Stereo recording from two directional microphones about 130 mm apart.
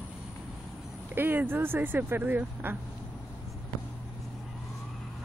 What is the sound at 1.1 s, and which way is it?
Speech, 15° right (ahead or behind).